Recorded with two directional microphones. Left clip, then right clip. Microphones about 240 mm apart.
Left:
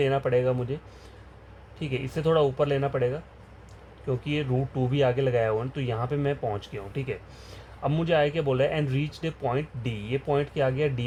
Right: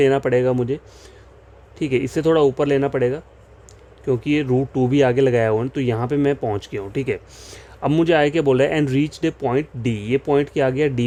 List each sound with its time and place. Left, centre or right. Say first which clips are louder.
0.0 s speech: right 7 dB; right
1.8 s speech: right 10 dB; right